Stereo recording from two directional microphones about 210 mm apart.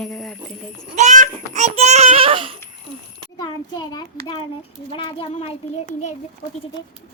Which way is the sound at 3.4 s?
20° left (ahead or behind).